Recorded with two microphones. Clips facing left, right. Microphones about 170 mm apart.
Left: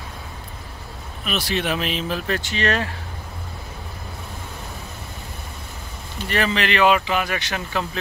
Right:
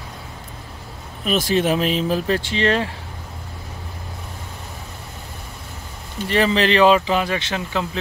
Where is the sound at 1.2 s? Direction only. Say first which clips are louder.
Right 6 dB; 45° right (ahead or behind); by 2.9 s 25° right (ahead or behind).